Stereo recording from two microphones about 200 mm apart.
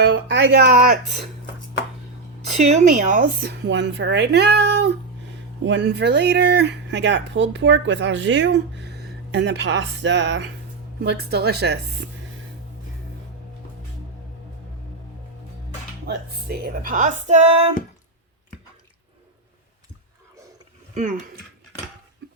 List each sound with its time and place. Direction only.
0.1 s speech: 65° right (ahead or behind); by 1.2 s 40° right (ahead or behind)
2.6 s speech: 35° right (ahead or behind); by 12.0 s 55° right (ahead or behind)
16.0 s speech: 50° right (ahead or behind); by 17.7 s 35° right (ahead or behind)
20.9 s speech: 40° right (ahead or behind)